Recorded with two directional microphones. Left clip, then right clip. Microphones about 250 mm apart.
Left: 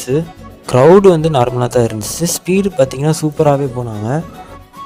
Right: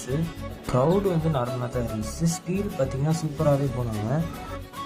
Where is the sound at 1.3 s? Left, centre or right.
Left.